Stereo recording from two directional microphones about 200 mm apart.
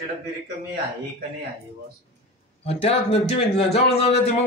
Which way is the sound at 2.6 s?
30° left (ahead or behind).